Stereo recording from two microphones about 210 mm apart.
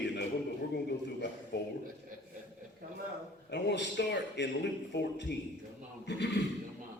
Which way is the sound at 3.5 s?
55° left (ahead or behind).